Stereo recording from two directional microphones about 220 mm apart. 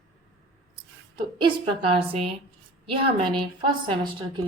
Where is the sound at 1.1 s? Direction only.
20° right (ahead or behind).